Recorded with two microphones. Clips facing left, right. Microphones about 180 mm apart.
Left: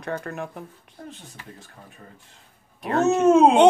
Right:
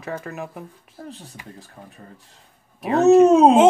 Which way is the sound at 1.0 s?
35° right (ahead or behind).